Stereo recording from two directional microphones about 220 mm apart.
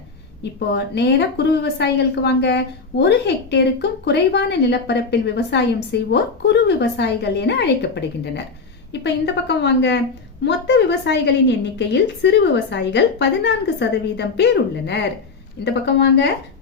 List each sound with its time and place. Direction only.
0.7 s speech: 50° left (ahead or behind)